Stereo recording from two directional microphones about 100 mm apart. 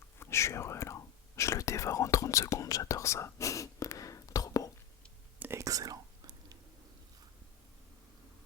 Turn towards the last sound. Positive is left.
turn(degrees=-40)  # may be behind; listen again after turning